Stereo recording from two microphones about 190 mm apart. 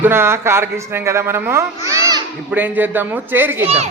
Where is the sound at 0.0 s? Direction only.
10° right (ahead or behind).